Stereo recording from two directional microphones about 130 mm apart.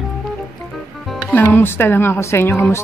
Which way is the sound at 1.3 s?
15° left (ahead or behind).